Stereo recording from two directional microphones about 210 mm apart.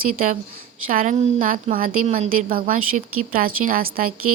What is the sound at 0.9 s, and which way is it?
A woman's voice, 40° right (ahead or behind).